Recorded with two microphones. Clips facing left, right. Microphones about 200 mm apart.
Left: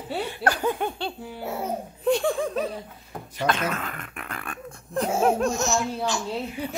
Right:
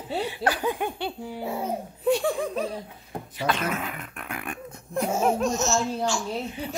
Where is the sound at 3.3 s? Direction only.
5° right (ahead or behind).